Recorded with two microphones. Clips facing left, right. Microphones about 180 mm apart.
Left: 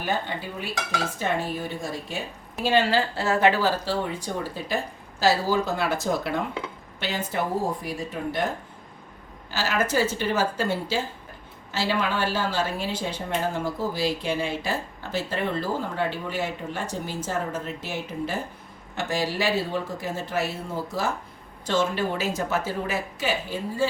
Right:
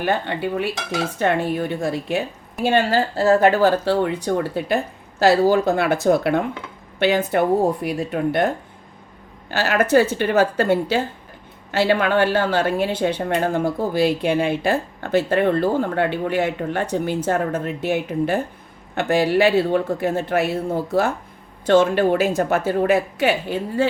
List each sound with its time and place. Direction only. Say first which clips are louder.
0.0 s dishes: right 7 dB; 65° right (ahead or behind)
1.2 s speech: right 9 dB; 60° right (ahead or behind)
2.6 s speech: right 4 dB; 50° right (ahead or behind)
9.5 s speech: right 8 dB; 60° right (ahead or behind)